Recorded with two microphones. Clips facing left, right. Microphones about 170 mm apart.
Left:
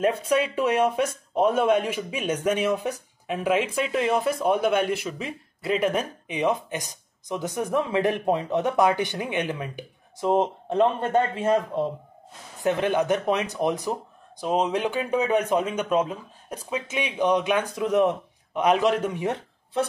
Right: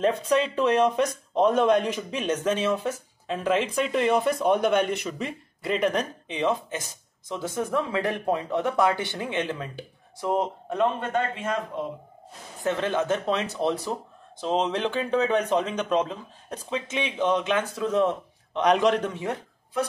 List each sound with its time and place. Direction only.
0.0 s speech: 10° left (ahead or behind); by 11.9 s 35° left (ahead or behind)
12.6 s speech: 15° left (ahead or behind)
19.2 s speech: 25° left (ahead or behind)